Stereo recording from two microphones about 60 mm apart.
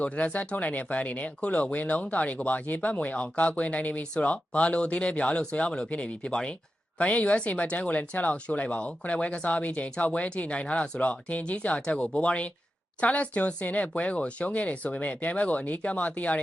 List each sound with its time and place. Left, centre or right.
0.0 s speech: left